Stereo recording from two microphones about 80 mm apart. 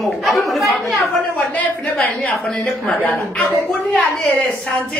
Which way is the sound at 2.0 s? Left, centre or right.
Centre.